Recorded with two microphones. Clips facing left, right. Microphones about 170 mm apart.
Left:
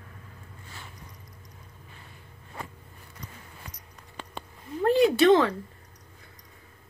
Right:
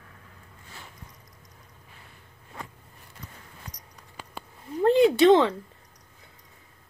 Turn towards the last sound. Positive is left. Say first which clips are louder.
# right 2 dB
turn(degrees=-25)  # may be behind; listen again after turning